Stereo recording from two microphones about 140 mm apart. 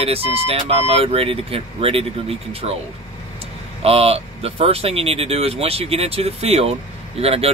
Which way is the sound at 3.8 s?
45° right (ahead or behind).